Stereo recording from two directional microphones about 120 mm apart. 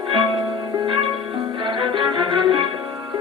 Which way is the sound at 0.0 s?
40° right (ahead or behind).